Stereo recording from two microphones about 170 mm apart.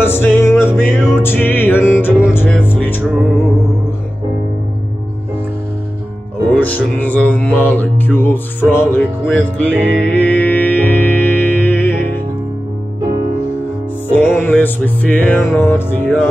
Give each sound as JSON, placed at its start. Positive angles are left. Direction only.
{"t": 0.0, "sound": "music", "side_deg": 15}
{"t": 6.5, "sound": "music", "side_deg": 10}
{"t": 14.1, "sound": "music", "side_deg": 10}